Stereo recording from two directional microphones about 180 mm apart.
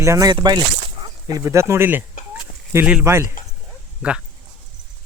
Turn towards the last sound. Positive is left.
turn(degrees=-5)  # may be behind; listen again after turning